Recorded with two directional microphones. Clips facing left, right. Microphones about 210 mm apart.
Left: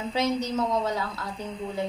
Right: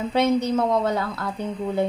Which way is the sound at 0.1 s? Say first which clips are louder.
Right 6 dB; 60° right (ahead or behind).